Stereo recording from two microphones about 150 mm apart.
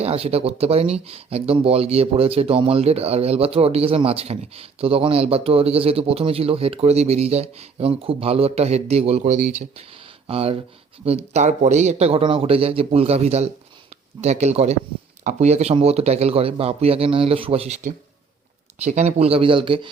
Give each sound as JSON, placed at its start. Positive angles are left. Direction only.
{"t": 0.0, "sound": "speech", "side_deg": -40}
{"t": 18.8, "sound": "speech", "side_deg": -50}